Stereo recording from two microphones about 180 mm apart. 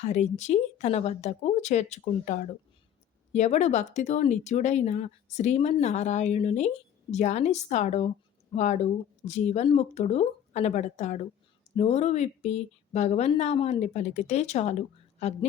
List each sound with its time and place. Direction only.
0.0 s speech: 40° left (ahead or behind)